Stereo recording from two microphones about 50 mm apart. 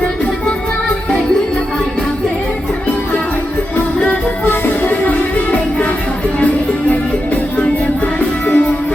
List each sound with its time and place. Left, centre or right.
4.4 s music: left
7.6 s music: left